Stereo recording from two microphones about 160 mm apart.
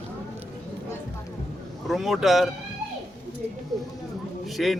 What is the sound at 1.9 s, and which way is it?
Speech, centre (ahead or behind).